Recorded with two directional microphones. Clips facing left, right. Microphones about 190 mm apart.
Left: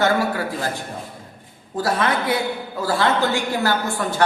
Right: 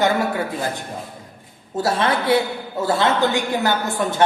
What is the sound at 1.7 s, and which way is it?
A woman's voice, 25° right (ahead or behind).